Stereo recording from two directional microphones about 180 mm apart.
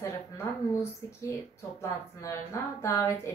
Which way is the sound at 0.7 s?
15° left (ahead or behind).